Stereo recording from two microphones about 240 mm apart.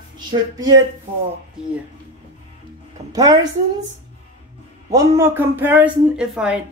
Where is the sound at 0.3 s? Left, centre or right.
Centre.